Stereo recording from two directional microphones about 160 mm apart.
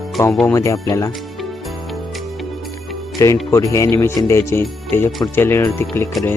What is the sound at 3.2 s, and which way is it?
Speech, 20° left (ahead or behind).